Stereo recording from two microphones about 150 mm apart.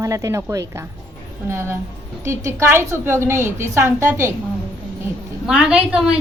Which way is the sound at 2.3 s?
20° right (ahead or behind).